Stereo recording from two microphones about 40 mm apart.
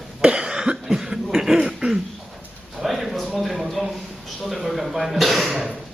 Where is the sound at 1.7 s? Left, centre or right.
Centre.